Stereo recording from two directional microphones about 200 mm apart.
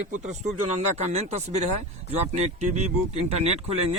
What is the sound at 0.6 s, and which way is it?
Speech, 35° right (ahead or behind).